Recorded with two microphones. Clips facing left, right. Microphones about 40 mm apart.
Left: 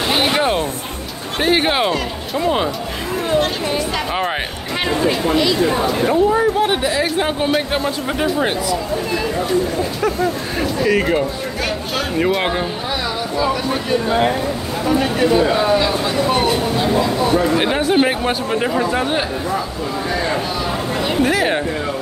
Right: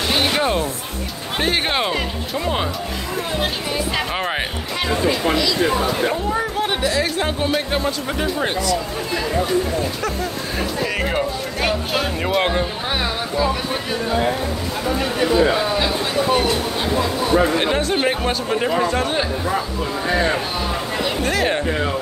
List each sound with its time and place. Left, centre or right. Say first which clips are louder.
0.1 s music: left 2 dB; centre
1.4 s speech: left 4 dB; centre
6.0 s speech: left 6 dB; centre
10.8 s speech: left 6 dB; centre
17.6 s speech: left 4 dB; centre
21.2 s speech: left 4 dB; centre